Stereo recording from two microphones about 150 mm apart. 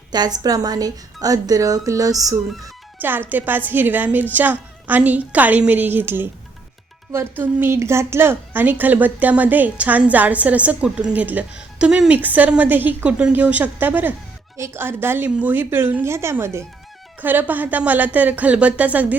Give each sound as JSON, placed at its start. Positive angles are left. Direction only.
{"t": 0.1, "sound": "a woman's voice", "side_deg": -25}
{"t": 2.5, "sound": "speech", "side_deg": 0}
{"t": 3.0, "sound": "a woman's voice", "side_deg": -15}